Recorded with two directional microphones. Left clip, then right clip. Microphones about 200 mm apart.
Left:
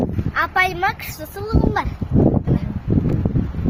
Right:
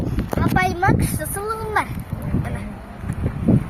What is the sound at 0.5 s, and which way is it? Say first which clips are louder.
Speech: right 1 dB; centre (ahead or behind).